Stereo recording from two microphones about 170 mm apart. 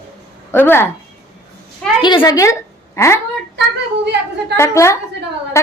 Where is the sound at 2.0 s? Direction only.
25° left (ahead or behind).